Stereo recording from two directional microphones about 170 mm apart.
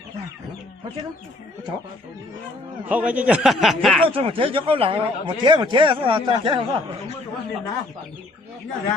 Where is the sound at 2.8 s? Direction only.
10° right (ahead or behind).